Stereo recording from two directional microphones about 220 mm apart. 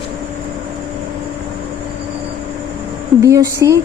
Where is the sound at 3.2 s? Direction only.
15° right (ahead or behind).